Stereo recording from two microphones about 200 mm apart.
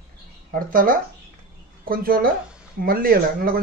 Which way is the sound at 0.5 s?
45° right (ahead or behind).